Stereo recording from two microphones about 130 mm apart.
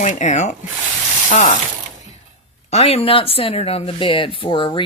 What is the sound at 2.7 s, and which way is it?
Speech, 50° left (ahead or behind).